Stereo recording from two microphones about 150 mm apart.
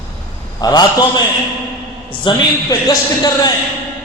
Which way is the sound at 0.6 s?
25° left (ahead or behind).